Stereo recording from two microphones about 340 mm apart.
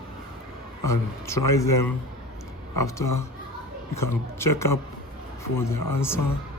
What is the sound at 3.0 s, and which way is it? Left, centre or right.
Speech, left.